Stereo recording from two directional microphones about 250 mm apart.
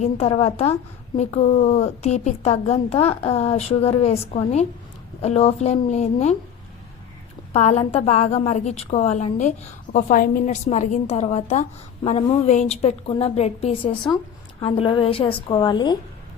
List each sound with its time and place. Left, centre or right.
0.0 s a woman's voice: left
7.5 s a woman's voice: left